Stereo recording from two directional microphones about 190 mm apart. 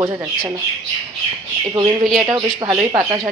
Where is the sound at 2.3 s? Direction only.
20° right (ahead or behind).